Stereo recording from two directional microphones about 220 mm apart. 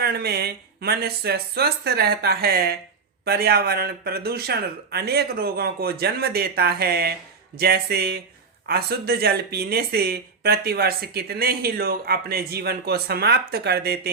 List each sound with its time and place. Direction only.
0.0 s speech: 45° right (ahead or behind)